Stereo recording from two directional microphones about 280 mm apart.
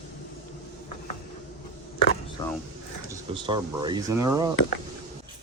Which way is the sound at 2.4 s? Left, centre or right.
Centre.